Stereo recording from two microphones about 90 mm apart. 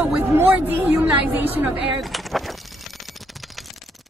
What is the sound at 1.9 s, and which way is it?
Speech, centre (ahead or behind).